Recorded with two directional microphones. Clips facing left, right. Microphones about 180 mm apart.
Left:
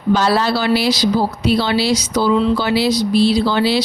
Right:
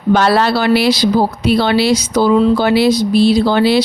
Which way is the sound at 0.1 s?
60° right (ahead or behind).